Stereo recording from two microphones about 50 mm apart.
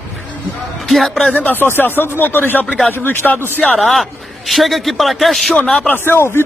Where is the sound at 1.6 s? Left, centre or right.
Left.